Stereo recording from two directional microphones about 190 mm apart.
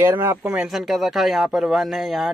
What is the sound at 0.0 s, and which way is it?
Speech, 10° right (ahead or behind).